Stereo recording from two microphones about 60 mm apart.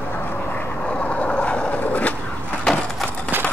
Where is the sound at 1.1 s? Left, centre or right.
Centre.